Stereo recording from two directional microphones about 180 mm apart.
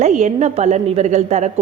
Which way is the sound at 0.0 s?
40° right (ahead or behind).